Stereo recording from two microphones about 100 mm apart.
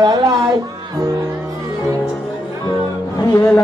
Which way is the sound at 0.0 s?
45° right (ahead or behind).